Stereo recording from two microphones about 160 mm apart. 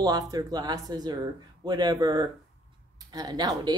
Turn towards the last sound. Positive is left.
turn(degrees=-25)  # may be behind; listen again after turning